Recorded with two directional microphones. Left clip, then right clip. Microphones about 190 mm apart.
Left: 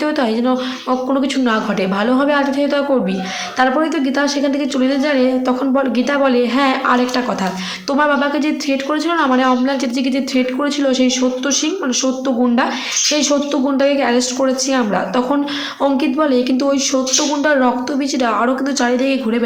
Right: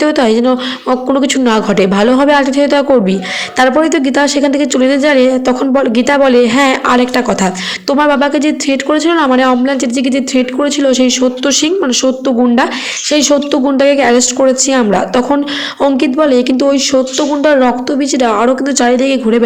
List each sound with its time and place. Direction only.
0.0 s a woman's voice: 35° right (ahead or behind)